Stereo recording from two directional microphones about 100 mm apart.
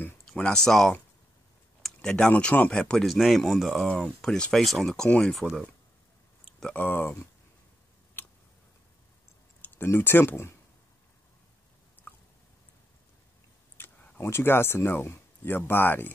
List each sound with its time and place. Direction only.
0.3 s speech: 5° left (ahead or behind)
6.6 s speech: 15° left (ahead or behind)
8.2 s scissors: 20° left (ahead or behind)
9.8 s speech: 25° left (ahead or behind)
12.1 s a sound: 20° left (ahead or behind)
13.7 s a sound: 20° left (ahead or behind)
14.2 s speech: 25° left (ahead or behind)